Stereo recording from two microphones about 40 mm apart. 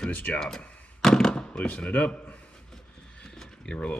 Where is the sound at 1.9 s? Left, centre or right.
Left.